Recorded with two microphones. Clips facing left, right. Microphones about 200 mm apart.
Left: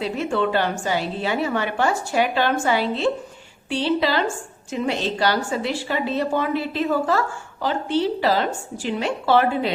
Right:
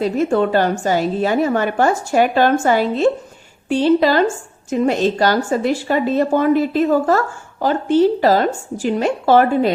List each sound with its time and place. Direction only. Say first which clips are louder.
0.0 s a woman's voice: right 6 dB; 45° right (ahead or behind)